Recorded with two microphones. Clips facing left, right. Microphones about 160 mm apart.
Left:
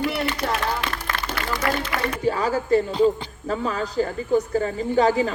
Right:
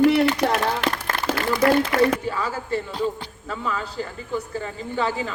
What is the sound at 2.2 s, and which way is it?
A woman's voice, 40° left (ahead or behind).